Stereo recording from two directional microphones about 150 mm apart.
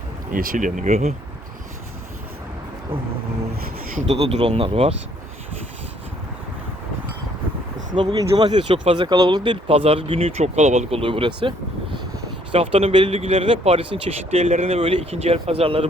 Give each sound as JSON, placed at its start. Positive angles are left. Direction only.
{"t": 0.3, "sound": "speech", "side_deg": -65}
{"t": 4.0, "sound": "speech", "side_deg": -40}
{"t": 8.3, "sound": "speech", "side_deg": -30}